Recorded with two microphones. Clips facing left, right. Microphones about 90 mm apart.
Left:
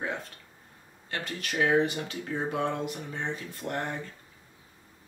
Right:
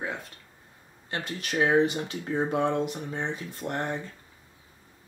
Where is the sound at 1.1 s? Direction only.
25° right (ahead or behind).